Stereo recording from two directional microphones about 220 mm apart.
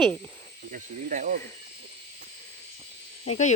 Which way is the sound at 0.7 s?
40° right (ahead or behind).